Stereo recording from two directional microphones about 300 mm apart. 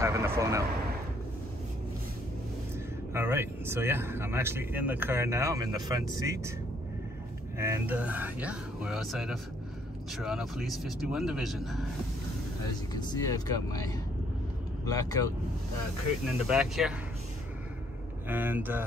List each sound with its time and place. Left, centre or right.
0.0 s vehicle: centre
3.1 s speech: centre
7.5 s speech: centre
12.9 s speech: centre
15.0 s speech: centre
16.4 s speech: centre
18.3 s speech: centre